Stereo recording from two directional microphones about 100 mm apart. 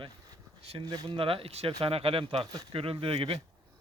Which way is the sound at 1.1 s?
65° right (ahead or behind).